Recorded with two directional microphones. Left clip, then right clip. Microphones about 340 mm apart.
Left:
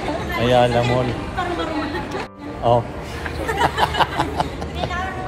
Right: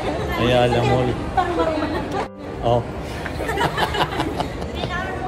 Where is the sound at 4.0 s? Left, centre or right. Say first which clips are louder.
Left 3 dB; centre.